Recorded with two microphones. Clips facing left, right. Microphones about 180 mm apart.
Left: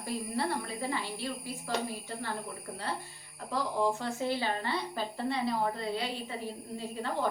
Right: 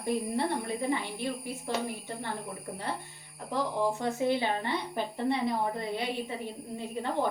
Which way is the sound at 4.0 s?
20° right (ahead or behind).